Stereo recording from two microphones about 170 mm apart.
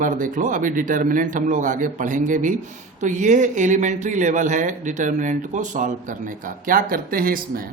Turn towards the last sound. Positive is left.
turn(degrees=-55)  # may be behind; listen again after turning